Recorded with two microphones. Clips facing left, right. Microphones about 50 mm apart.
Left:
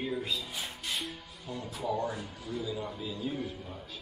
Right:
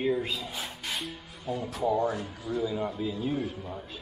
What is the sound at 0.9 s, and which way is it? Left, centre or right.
Music, centre.